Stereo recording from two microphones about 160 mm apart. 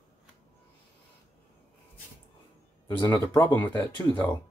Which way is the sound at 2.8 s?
20° left (ahead or behind).